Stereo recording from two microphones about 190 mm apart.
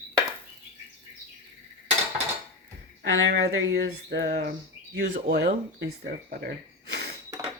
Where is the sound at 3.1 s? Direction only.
65° right (ahead or behind).